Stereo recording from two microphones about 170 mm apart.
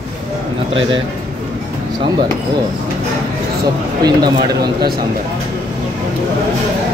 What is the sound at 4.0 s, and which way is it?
Speech, 25° right (ahead or behind).